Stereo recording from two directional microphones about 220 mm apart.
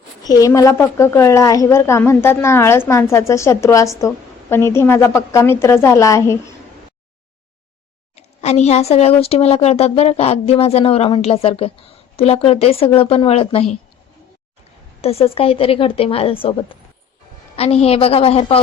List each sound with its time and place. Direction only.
0.3 s a woman's voice: 15° left (ahead or behind)
8.1 s speech: 30° left (ahead or behind)
15.0 s speech: 25° left (ahead or behind)